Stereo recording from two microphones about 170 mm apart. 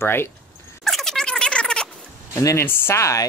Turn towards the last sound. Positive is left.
turn(degrees=15)  # may be behind; listen again after turning